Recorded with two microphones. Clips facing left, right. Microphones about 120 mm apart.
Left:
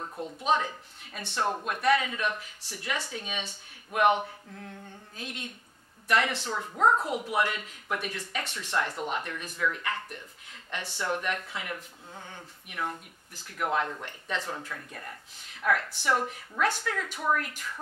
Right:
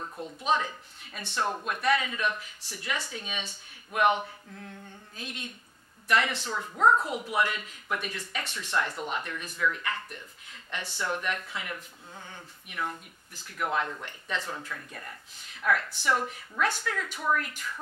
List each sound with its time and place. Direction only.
0.0 s speech: 25° left (ahead or behind)
0.5 s speech: 40° left (ahead or behind)
1.2 s speech: 25° left (ahead or behind)
1.7 s speech: 45° left (ahead or behind)
4.2 s speech: 40° left (ahead or behind)
6.3 s speech: 30° left (ahead or behind)
7.2 s speech: 50° left (ahead or behind)